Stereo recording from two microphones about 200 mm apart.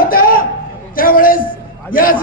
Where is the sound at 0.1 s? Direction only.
45° left (ahead or behind).